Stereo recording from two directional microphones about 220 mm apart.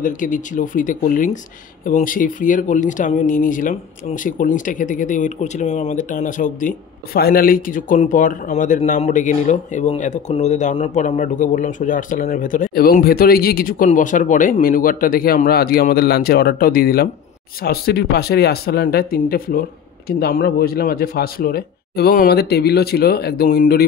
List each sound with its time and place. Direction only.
0.0 s speech: 35° left (ahead or behind)